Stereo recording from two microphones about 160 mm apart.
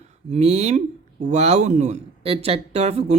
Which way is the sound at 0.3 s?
45° right (ahead or behind).